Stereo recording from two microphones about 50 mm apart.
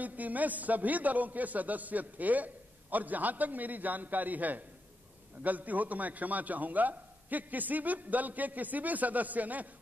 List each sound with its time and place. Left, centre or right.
0.0 s a man's voice: right